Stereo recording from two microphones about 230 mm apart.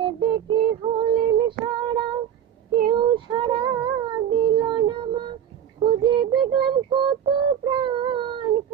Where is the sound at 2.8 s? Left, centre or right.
Right.